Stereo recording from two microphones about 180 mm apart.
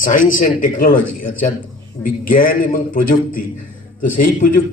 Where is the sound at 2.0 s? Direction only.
50° left (ahead or behind).